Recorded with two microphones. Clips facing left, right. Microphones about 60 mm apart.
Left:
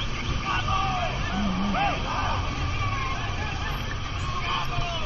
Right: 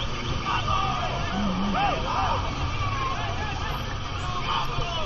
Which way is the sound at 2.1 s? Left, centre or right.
Centre.